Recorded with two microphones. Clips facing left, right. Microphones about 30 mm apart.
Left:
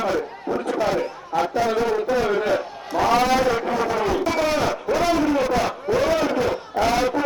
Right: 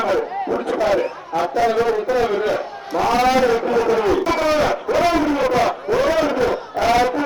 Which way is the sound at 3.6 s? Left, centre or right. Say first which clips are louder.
Right 5 dB; centre.